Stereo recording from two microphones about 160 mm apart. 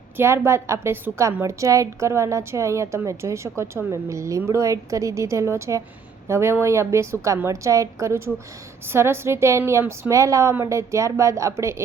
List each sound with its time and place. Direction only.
0.2 s a woman's voice: 15° right (ahead or behind)